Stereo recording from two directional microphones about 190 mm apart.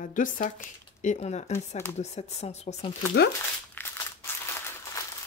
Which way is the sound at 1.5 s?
15° left (ahead or behind).